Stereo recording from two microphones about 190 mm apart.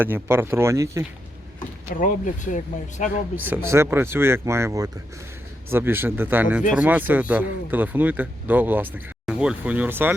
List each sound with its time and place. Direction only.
0.0 s speech: 10° right (ahead or behind)
1.9 s speech: 45° left (ahead or behind)
3.3 s speech: 10° right (ahead or behind)